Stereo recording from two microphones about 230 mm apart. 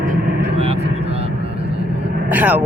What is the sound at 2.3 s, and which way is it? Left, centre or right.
Speech, centre.